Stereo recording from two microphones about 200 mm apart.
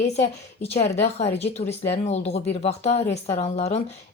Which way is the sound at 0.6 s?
30° left (ahead or behind).